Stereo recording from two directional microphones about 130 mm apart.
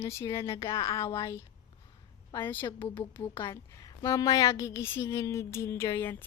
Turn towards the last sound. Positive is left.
turn(degrees=20)  # may be behind; listen again after turning